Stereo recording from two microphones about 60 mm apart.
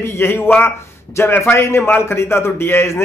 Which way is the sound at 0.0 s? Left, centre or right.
Left.